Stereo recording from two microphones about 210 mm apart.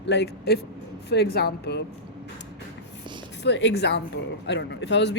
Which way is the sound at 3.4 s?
55° left (ahead or behind).